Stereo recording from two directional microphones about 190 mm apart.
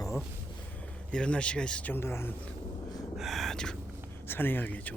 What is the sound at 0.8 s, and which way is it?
Speech, 5° left (ahead or behind).